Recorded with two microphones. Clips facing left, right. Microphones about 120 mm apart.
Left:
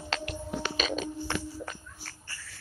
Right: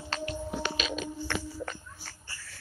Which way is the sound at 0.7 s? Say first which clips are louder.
Left 2 dB; 40° left (ahead or behind).